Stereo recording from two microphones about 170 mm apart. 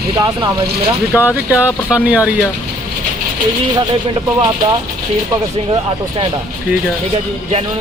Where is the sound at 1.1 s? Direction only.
10° right (ahead or behind).